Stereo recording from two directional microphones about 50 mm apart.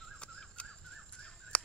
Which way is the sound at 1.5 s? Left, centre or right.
Left.